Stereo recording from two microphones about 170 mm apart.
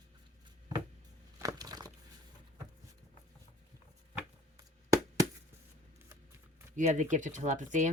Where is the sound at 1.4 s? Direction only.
20° right (ahead or behind).